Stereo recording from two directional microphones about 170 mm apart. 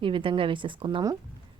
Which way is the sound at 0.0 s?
30° right (ahead or behind).